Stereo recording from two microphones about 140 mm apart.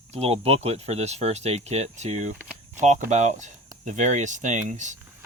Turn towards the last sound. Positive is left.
turn(degrees=-60)  # may be behind; listen again after turning